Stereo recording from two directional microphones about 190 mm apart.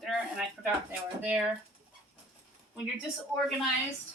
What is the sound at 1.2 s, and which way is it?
Speech, 5° right (ahead or behind).